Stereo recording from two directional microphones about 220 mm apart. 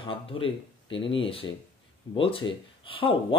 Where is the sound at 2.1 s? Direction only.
25° left (ahead or behind).